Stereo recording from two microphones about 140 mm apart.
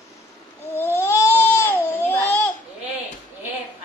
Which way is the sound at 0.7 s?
15° left (ahead or behind).